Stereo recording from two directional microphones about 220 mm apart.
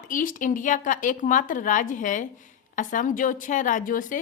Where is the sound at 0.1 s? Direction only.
35° left (ahead or behind).